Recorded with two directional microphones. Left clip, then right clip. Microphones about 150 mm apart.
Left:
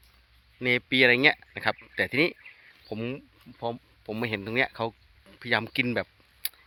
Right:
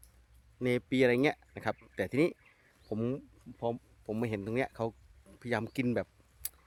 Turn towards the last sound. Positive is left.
turn(degrees=-5)  # may be behind; listen again after turning